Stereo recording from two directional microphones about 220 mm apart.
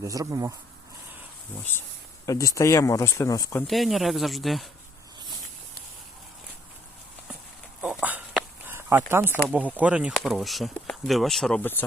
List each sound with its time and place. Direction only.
0.0 s speech: 15° right (ahead or behind)
2.2 s speech: 15° left (ahead or behind)
3.7 s speech: centre (ahead or behind)
7.8 s a sound: 5° right (ahead or behind)
9.5 s speech: 5° right (ahead or behind); by 11.9 s 10° left (ahead or behind)